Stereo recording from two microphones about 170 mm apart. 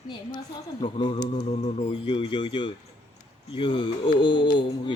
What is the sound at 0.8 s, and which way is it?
A child's voice, 35° left (ahead or behind).